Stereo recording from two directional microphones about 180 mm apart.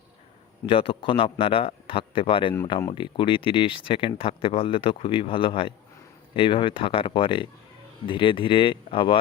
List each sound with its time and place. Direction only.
0.6 s speech: 30° left (ahead or behind)